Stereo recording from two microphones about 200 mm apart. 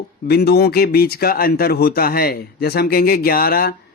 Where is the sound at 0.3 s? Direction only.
55° left (ahead or behind).